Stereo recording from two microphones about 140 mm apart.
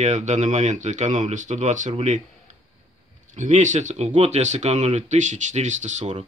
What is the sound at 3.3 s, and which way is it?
Speech, 60° right (ahead or behind).